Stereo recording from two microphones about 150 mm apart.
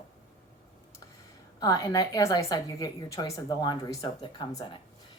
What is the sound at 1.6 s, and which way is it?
A woman's voice, 20° left (ahead or behind).